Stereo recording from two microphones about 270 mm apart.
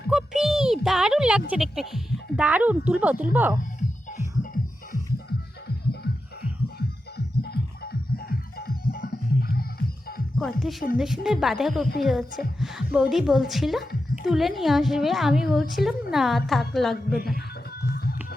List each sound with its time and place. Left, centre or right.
0.1 s a sound: centre
2.3 s a woman's voice: centre
8.1 s music: left
10.3 s a woman's voice: centre